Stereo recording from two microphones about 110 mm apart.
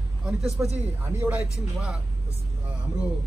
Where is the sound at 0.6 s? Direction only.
20° right (ahead or behind).